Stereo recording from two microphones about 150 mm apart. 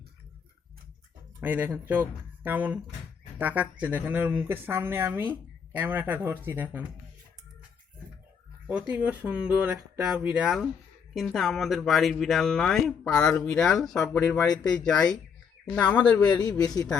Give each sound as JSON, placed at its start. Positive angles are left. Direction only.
{"t": 1.4, "sound": "speech", "side_deg": -10}
{"t": 8.7, "sound": "speech", "side_deg": -10}
{"t": 16.2, "sound": "a man's voice", "side_deg": 25}